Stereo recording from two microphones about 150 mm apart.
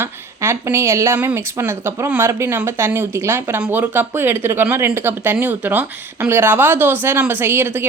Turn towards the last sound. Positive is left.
turn(degrees=-15)  # may be behind; listen again after turning